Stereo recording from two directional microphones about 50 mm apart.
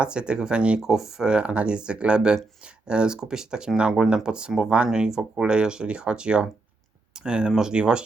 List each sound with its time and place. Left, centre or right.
0.0 s speech: centre
0.8 s speech: centre